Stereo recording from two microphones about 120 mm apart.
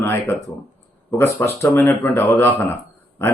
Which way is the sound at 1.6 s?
20° left (ahead or behind).